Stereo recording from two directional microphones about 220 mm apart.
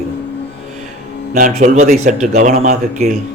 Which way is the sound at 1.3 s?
35° right (ahead or behind).